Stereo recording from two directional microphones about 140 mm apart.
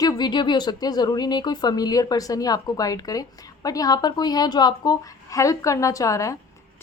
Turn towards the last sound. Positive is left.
turn(degrees=20)  # may be behind; listen again after turning